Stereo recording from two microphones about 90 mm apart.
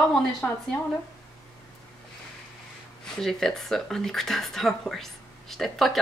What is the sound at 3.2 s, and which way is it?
A woman's voice, 5° left (ahead or behind).